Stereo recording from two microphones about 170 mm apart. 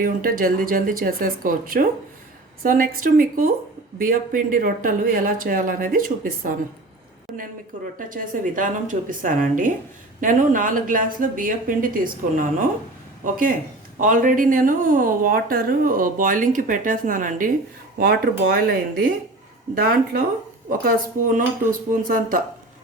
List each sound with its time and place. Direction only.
0.0 s speech: 55° right (ahead or behind)
7.9 s speech: 55° right (ahead or behind)
21.3 s speech: 55° right (ahead or behind)